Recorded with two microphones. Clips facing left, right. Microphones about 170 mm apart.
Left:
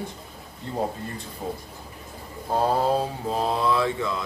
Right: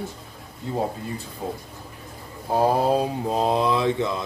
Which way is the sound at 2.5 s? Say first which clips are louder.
Right 2 dB; 15° right (ahead or behind).